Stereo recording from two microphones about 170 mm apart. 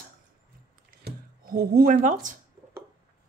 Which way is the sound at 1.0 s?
60° right (ahead or behind).